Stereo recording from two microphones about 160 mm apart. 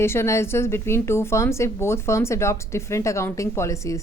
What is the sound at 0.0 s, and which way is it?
A woman's voice, 15° left (ahead or behind).